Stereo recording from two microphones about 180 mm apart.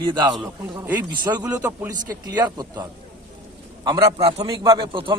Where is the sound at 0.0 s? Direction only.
25° right (ahead or behind).